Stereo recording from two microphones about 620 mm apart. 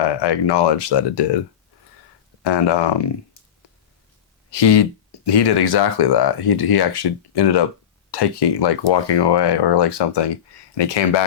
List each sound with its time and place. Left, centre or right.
0.1 s speech: left
2.4 s speech: left
4.5 s speech: left